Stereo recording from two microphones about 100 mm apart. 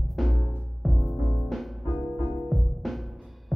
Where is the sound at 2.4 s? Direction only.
Centre (ahead or behind).